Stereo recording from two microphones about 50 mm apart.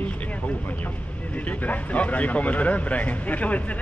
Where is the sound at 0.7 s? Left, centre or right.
Left.